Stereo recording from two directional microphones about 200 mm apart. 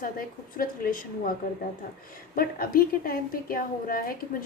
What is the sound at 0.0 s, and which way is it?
A woman's voice, 45° left (ahead or behind).